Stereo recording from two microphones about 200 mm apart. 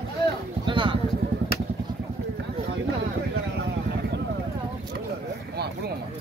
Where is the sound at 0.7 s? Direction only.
25° right (ahead or behind).